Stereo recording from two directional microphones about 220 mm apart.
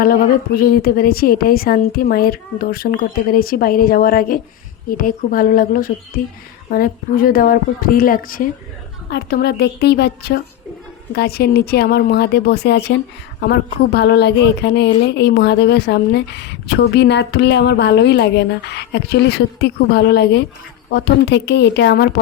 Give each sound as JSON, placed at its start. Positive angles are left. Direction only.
{"t": 0.0, "sound": "a woman's voice", "side_deg": 40}